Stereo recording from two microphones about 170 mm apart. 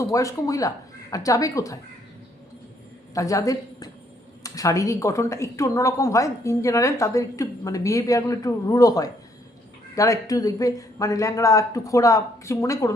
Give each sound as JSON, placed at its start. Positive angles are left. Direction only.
{"t": 0.0, "sound": "a woman's voice", "side_deg": 20}
{"t": 3.2, "sound": "a woman's voice", "side_deg": 20}